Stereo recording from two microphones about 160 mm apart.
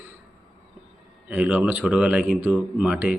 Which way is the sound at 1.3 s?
10° right (ahead or behind).